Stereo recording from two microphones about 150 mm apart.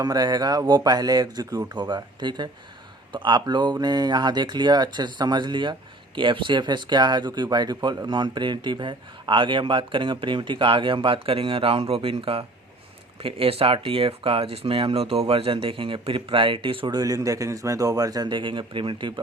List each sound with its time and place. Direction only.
0.0 s speech: 25° right (ahead or behind)